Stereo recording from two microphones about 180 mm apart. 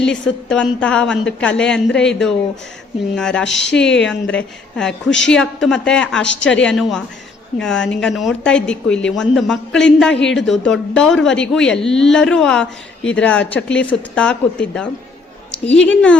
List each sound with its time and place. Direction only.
0.0 s a woman's voice: 5° left (ahead or behind)